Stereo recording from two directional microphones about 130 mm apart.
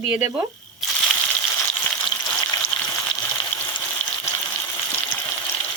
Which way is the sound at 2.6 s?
10° left (ahead or behind).